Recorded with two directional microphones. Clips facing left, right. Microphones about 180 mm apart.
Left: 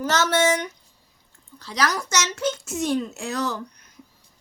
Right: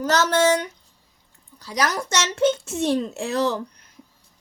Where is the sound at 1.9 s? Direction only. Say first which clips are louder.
Right 1 dB; 30° right (ahead or behind).